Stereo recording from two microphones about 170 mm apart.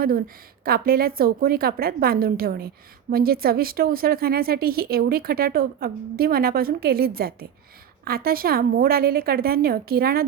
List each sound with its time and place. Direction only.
0.0 s speech: 60° right (ahead or behind)